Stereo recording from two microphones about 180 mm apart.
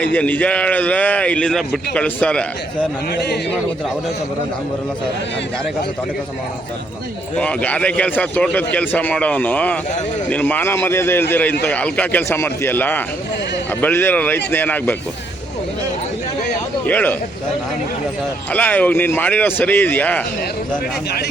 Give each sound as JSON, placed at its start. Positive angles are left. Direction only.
{"t": 0.0, "sound": "speech", "side_deg": 10}
{"t": 3.1, "sound": "speech", "side_deg": 65}
{"t": 7.3, "sound": "speech", "side_deg": 5}
{"t": 16.8, "sound": "speech", "side_deg": 10}
{"t": 18.5, "sound": "speech", "side_deg": 10}